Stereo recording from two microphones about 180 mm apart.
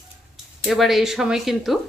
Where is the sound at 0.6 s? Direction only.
Centre (ahead or behind).